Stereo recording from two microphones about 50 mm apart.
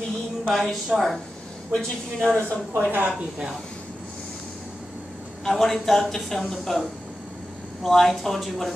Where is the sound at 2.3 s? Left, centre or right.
Left.